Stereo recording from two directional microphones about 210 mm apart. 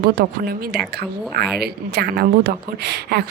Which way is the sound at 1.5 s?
50° right (ahead or behind).